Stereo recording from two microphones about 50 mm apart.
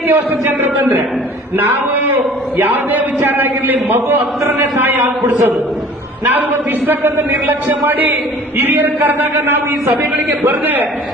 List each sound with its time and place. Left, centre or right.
0.1 s a man's voice: right
8.5 s a man's voice: right
8.8 s a man's voice: right